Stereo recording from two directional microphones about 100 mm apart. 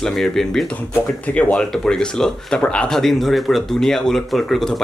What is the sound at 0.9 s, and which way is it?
Speech, 15° left (ahead or behind).